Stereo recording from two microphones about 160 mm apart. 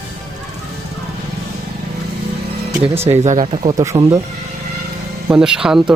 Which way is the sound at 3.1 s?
45° right (ahead or behind).